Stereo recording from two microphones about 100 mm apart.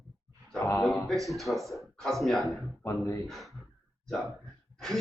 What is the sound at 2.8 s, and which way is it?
Speech, 30° left (ahead or behind).